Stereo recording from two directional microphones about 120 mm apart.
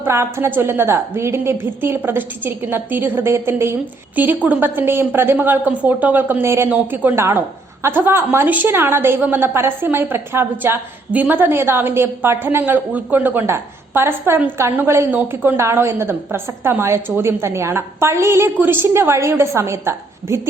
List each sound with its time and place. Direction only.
0.0 s a woman's voice: 20° right (ahead or behind)